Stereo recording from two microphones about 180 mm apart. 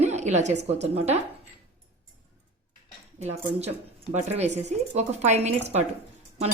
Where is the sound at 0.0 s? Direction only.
40° right (ahead or behind).